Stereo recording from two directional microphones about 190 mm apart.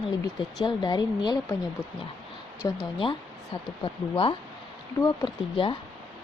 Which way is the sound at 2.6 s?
15° left (ahead or behind).